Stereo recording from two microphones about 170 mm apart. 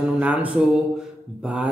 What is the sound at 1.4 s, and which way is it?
Speech, 5° right (ahead or behind).